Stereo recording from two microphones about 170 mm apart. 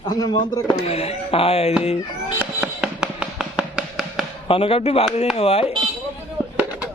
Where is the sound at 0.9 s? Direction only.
35° left (ahead or behind).